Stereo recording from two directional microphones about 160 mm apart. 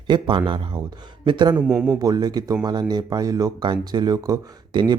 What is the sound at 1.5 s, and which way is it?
Speech, 5° right (ahead or behind).